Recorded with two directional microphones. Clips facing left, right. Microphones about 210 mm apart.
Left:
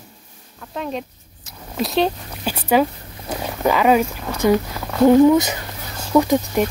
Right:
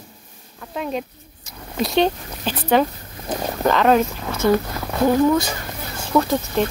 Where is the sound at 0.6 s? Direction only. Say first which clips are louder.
Right 1 dB; 5° right (ahead or behind); by 6.6 s 15° left (ahead or behind).